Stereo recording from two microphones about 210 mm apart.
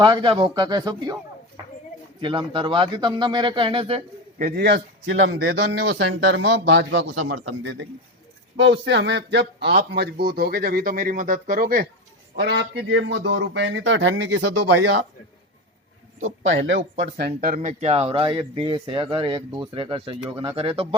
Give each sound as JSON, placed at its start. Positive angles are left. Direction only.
{"t": 0.0, "sound": "speech", "side_deg": -20}
{"t": 2.2, "sound": "speech", "side_deg": -25}
{"t": 4.4, "sound": "a man's voice", "side_deg": -45}
{"t": 5.8, "sound": "a man's voice", "side_deg": -50}
{"t": 12.4, "sound": "a man's voice", "side_deg": -55}
{"t": 14.5, "sound": "speech", "side_deg": -90}
{"t": 16.4, "sound": "a man's voice", "side_deg": -60}
{"t": 17.0, "sound": "speech", "side_deg": -50}